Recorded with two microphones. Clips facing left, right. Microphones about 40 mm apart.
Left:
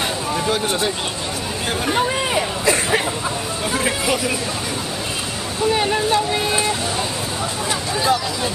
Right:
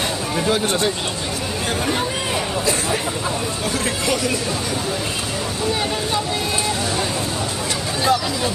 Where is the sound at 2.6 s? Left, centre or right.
Left.